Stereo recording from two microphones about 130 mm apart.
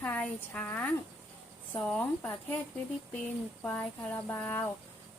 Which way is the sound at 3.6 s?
15° left (ahead or behind).